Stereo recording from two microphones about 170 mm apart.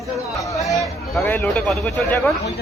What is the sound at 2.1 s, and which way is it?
Speech, 15° left (ahead or behind).